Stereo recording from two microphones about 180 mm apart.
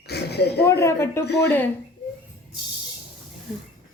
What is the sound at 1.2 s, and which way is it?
Speech, 70° left (ahead or behind).